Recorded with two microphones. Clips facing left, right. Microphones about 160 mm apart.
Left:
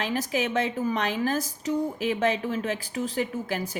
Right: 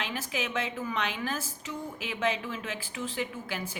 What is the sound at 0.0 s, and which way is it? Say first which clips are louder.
A woman's voice: left 7 dB; 40° left (ahead or behind).